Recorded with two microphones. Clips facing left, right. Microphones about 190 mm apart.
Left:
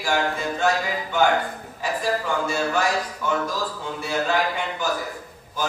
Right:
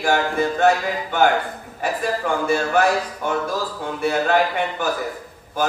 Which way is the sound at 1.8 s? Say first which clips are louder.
Right 2 dB; 60° right (ahead or behind).